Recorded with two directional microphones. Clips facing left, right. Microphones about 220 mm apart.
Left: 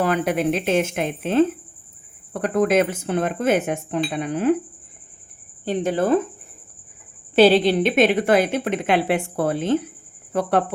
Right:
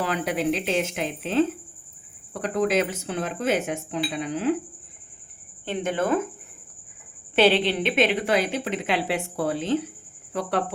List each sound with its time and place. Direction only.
0.0 s a woman's voice: 50° left (ahead or behind)
5.6 s speech: 35° left (ahead or behind)
7.3 s a woman's voice: 40° left (ahead or behind)